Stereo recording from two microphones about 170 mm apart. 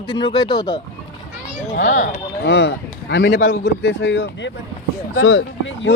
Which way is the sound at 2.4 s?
90° left.